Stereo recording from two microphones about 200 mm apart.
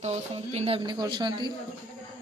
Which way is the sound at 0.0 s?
30° right (ahead or behind).